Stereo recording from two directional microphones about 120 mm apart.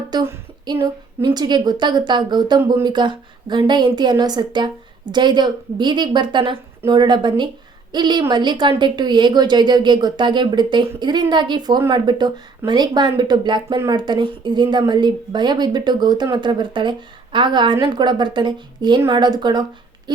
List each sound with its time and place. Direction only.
0.1 s a woman's voice: 35° right (ahead or behind)